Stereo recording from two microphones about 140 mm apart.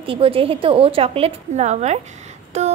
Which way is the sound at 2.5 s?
50° right (ahead or behind).